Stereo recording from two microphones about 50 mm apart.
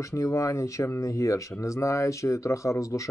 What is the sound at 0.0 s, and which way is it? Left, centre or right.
Speech, left.